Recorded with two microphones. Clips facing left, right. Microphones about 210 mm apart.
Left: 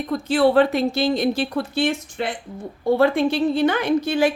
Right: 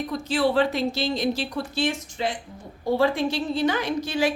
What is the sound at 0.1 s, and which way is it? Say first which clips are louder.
A woman's voice: left 7 dB; 55° left (ahead or behind).